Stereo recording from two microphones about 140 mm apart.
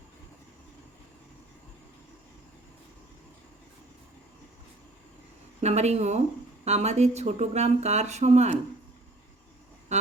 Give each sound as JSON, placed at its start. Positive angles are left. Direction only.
{"t": 5.5, "sound": "speech", "side_deg": -50}